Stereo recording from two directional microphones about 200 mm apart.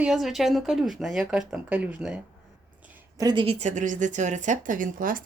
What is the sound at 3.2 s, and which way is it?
A woman's voice, 20° right (ahead or behind).